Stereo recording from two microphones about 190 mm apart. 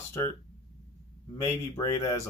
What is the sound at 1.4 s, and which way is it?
Speech, 15° left (ahead or behind).